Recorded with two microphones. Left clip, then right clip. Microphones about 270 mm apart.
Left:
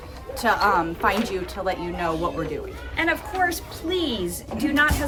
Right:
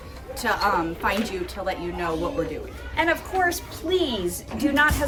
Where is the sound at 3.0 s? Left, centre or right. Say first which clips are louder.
Right 1 dB; centre.